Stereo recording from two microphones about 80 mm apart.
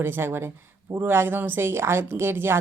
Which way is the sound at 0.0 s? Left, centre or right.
Right.